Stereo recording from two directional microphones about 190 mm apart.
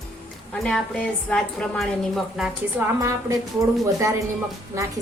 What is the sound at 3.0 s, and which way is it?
A woman's voice, 15° right (ahead or behind).